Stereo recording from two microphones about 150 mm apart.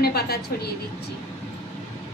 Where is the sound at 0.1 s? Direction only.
90° left.